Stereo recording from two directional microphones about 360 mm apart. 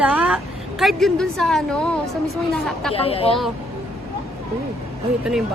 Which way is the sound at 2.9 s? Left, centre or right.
Centre.